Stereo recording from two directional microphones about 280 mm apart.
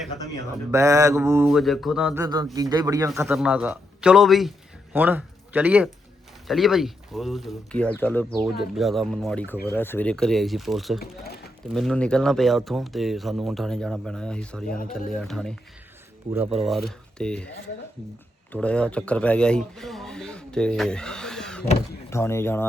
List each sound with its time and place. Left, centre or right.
0.7 s a man's voice: centre
11.0 s speech: left
11.7 s speech: centre
16.6 s speech: centre
18.5 s speech: centre